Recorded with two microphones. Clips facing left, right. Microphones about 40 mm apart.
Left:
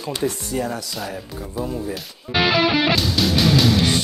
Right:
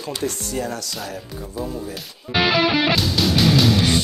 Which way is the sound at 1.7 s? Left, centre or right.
Centre.